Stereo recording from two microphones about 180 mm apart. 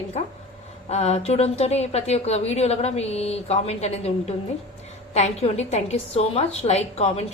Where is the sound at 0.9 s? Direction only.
35° left (ahead or behind).